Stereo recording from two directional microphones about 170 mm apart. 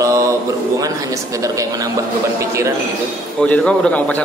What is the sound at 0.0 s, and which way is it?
Speech, 20° right (ahead or behind).